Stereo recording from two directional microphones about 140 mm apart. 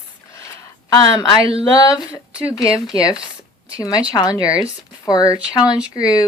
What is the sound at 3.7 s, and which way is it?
Speech, 25° left (ahead or behind).